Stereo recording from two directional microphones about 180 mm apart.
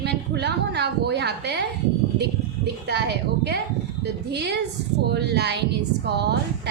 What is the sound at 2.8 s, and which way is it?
A woman's voice, 70° right (ahead or behind).